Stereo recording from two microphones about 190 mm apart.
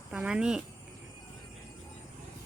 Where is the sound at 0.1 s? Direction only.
5° right (ahead or behind).